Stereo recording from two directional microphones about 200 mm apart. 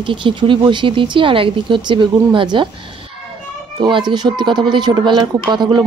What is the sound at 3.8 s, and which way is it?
Speech, 20° right (ahead or behind).